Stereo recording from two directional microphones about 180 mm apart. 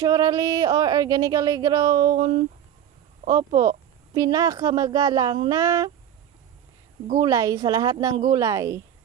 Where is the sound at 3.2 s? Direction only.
20° right (ahead or behind).